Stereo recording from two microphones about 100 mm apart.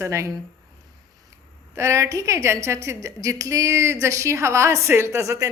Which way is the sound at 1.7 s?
30° right (ahead or behind).